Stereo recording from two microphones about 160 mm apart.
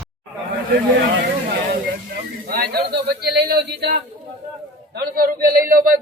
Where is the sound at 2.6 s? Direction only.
75° right (ahead or behind).